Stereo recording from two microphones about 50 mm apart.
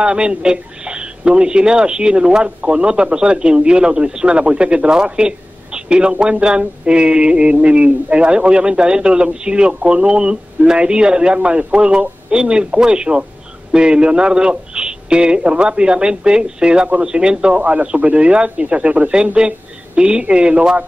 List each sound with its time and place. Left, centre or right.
0.0 s speech: centre
17.6 s speech: right